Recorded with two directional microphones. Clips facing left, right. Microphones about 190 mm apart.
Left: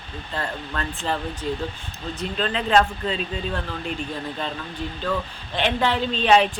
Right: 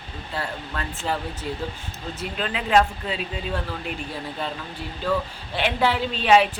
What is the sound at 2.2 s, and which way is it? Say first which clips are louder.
Speech: left 3 dB; 10° right (ahead or behind).